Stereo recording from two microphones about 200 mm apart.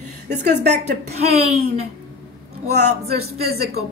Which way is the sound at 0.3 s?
55° right (ahead or behind).